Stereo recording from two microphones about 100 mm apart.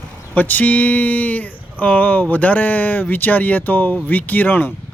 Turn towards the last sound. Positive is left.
turn(degrees=20)  # may be behind; listen again after turning